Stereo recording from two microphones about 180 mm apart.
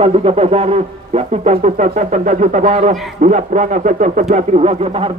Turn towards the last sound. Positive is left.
turn(degrees=-35)  # may be behind; listen again after turning